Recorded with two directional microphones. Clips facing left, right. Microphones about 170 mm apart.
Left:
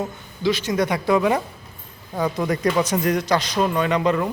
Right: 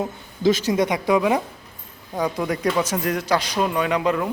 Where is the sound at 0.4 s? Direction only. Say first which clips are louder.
Right 3 dB; 45° right (ahead or behind).